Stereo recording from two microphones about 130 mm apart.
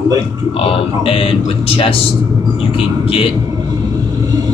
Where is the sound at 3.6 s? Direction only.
30° right (ahead or behind).